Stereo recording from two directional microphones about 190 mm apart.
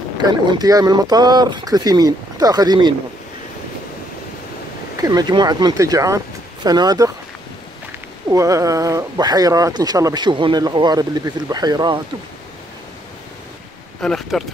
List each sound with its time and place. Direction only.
0.2 s speech: 20° right (ahead or behind)
4.9 s speech: 20° right (ahead or behind)
8.3 s speech: 15° right (ahead or behind)
14.0 s speech: centre (ahead or behind)